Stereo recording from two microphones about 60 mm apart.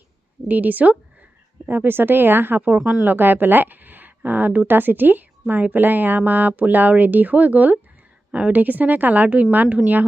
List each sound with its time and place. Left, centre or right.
0.4 s a woman's voice: right
2.7 s speech: centre
3.0 s a woman's voice: right